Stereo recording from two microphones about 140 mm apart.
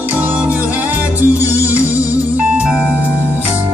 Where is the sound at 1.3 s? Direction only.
20° left (ahead or behind).